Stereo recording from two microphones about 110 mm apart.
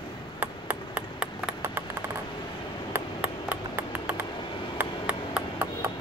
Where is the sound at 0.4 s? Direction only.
15° right (ahead or behind).